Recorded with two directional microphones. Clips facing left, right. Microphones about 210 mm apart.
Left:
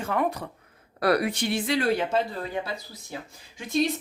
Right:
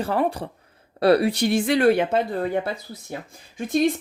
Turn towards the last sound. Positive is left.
turn(degrees=-50)  # may be behind; listen again after turning